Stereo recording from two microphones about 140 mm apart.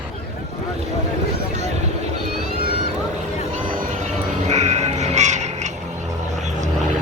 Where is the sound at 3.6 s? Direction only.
80° right.